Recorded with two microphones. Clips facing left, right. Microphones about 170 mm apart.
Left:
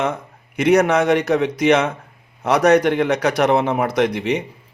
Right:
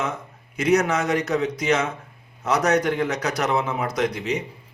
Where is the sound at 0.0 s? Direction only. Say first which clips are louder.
Left 6 dB; 60° left (ahead or behind).